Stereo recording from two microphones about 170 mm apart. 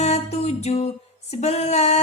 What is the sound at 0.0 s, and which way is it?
Music, 40° left (ahead or behind).